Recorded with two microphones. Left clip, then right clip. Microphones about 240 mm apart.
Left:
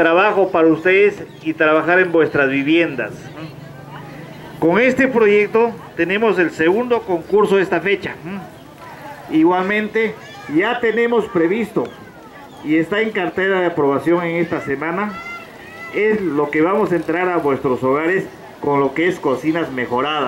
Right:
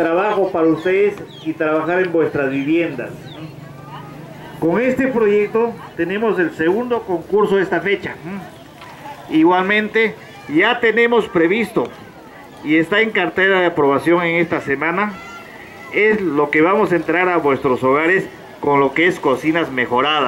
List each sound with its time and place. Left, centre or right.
0.3 s a sound: left
1.6 s a man's voice: centre
4.6 s a man's voice: centre